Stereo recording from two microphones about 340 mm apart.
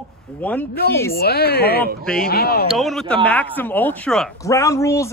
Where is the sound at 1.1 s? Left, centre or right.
Left.